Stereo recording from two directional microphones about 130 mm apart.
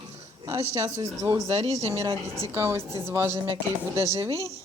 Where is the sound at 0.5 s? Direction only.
25° right (ahead or behind).